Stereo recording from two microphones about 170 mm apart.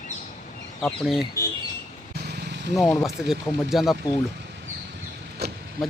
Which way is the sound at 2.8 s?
Centre (ahead or behind).